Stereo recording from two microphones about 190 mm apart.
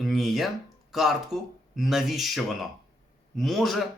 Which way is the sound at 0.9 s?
Centre (ahead or behind).